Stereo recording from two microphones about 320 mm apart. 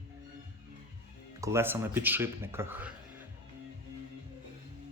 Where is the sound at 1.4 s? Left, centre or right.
Centre.